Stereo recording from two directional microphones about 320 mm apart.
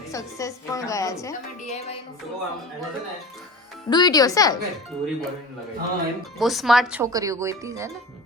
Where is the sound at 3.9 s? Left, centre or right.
Centre.